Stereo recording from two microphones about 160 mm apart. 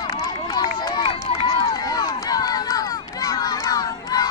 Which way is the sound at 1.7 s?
25° left (ahead or behind).